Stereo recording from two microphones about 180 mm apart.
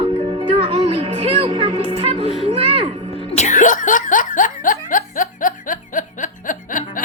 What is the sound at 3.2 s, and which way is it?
Laughter, 40° left (ahead or behind).